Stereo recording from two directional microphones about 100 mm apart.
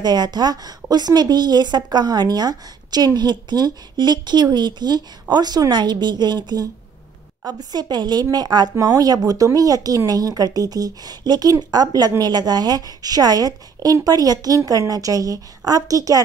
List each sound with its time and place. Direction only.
0.0 s a woman's voice: 45° right (ahead or behind)